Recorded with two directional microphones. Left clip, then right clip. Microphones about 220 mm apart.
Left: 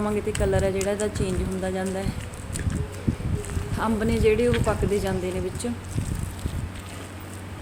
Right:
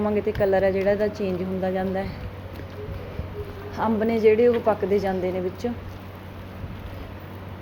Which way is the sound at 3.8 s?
Centre (ahead or behind).